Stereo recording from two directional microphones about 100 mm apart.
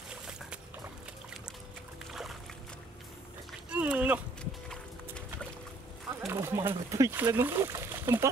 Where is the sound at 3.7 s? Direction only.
15° right (ahead or behind).